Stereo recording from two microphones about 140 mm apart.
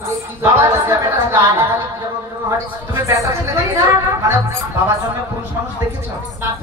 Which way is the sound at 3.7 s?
20° right (ahead or behind).